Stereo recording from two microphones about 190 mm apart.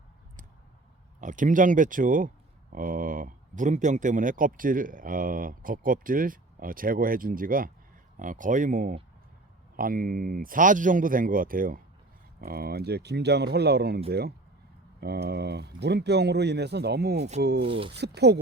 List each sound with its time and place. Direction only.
1.2 s speech: 40° right (ahead or behind); by 17.7 s 60° right (ahead or behind)
17.7 s speech: 30° right (ahead or behind)
17.9 s speech: 60° right (ahead or behind)